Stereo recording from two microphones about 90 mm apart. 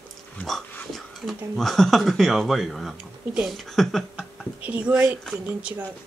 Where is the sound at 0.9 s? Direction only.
Centre (ahead or behind).